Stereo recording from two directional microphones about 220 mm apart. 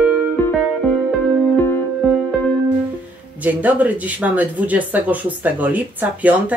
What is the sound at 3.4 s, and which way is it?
Speech, 5° right (ahead or behind).